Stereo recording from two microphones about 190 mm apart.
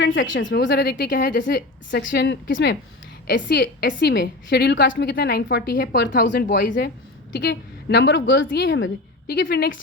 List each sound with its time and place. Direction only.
0.0 s a woman's voice: 75° left (ahead or behind); by 2.0 s 50° left (ahead or behind)
2.0 s a woman's voice: 70° left (ahead or behind)
3.2 s a woman's voice: 55° left (ahead or behind)
6.2 s a woman's voice: 70° left (ahead or behind)
6.7 s a woman's voice: 50° left (ahead or behind)
7.3 s a woman's voice: 60° left (ahead or behind)